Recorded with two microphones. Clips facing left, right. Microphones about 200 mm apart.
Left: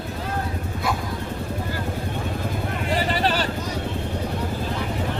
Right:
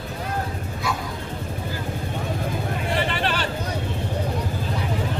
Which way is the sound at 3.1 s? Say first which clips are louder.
Left 3 dB; 40° left (ahead or behind).